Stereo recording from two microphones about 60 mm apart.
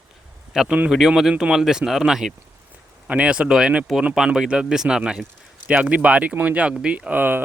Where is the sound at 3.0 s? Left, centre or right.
Right.